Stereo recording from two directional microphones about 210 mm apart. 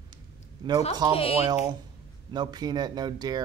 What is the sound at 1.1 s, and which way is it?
Speech, 25° left (ahead or behind).